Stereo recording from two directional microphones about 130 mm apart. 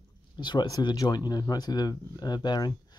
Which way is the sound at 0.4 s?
35° left (ahead or behind).